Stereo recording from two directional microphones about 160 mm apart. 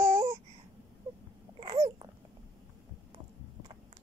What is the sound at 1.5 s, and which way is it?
Babbling, 30° right (ahead or behind).